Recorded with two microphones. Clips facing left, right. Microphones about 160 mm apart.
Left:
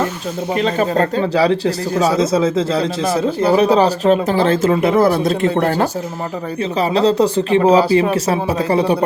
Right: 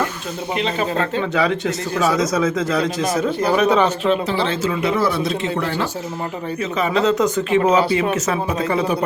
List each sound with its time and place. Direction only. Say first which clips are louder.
0.5 s speech: left 5 dB; 40° left (ahead or behind)
6.6 s speech: left 4 dB; 35° left (ahead or behind)